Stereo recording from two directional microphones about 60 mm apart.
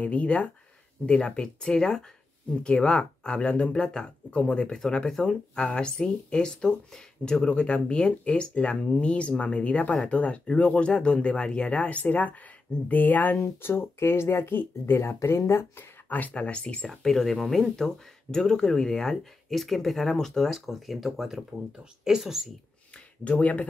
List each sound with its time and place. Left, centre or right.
0.0 s speech: left
13.6 s speech: left
15.2 s speech: left
16.1 s speech: left; by 22.5 s centre
23.2 s speech: left